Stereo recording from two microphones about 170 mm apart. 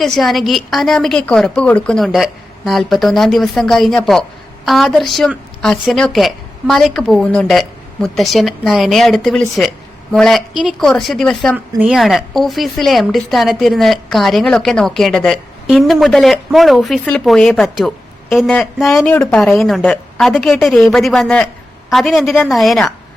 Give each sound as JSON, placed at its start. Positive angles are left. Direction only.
{"t": 0.0, "sound": "speech", "side_deg": 0}